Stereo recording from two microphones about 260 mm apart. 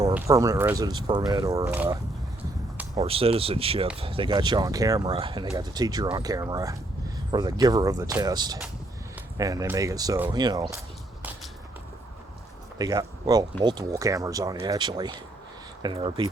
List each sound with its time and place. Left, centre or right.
0.0 s speech: centre
3.0 s speech: right
12.8 s speech: centre